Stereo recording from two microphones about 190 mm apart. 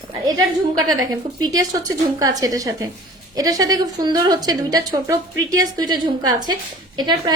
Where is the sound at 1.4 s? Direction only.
20° right (ahead or behind).